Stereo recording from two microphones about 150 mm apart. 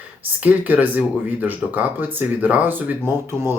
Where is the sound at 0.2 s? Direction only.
10° right (ahead or behind).